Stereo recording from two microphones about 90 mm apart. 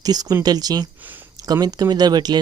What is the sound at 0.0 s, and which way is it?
Speech, 45° right (ahead or behind).